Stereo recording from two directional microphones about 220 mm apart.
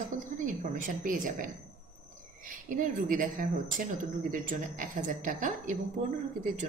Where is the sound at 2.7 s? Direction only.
40° right (ahead or behind).